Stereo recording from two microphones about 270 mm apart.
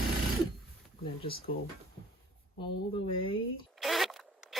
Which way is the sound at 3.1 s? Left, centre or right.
Centre.